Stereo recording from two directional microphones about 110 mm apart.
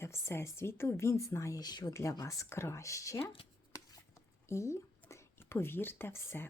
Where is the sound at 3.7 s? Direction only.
30° left (ahead or behind).